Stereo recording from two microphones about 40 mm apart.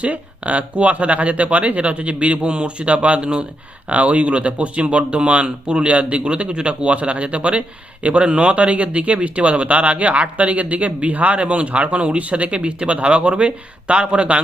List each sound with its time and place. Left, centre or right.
0.0 s speech: right